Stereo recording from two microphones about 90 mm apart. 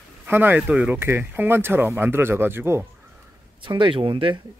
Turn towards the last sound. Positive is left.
turn(degrees=-70)  # may be behind; listen again after turning